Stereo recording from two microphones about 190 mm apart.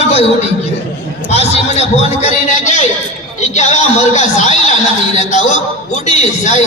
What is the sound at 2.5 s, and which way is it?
Speech, 40° left (ahead or behind).